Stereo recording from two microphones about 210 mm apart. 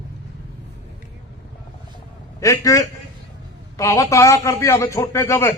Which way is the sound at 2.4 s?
15° left (ahead or behind).